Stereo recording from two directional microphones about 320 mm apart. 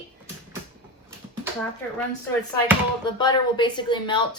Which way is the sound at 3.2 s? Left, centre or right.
Centre.